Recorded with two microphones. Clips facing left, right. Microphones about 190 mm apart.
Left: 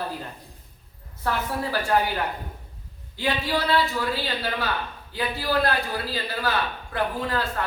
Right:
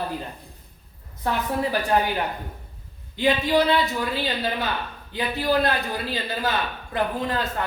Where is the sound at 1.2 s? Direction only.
20° right (ahead or behind).